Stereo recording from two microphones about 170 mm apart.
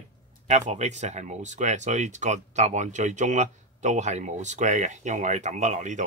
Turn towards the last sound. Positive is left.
turn(degrees=-45)  # may be behind; listen again after turning